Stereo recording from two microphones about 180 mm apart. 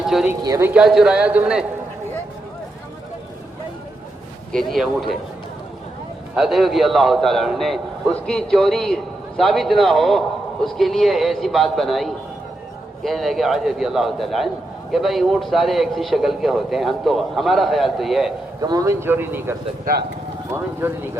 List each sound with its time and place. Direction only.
0.0 s speech: centre (ahead or behind)
0.4 s speech: 20° right (ahead or behind)
0.7 s a man's voice: 5° right (ahead or behind)
4.7 s a man's voice: centre (ahead or behind)
6.3 s a man's voice: centre (ahead or behind)
18.6 s speech: 20° right (ahead or behind)
19.8 s speech: 60° right (ahead or behind)